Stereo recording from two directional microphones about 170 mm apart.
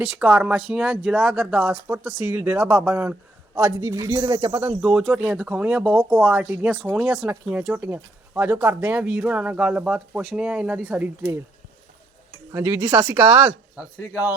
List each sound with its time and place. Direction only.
0.2 s speech: 5° right (ahead or behind)
4.8 s speech: 5° right (ahead or behind)
12.5 s speech: 15° right (ahead or behind)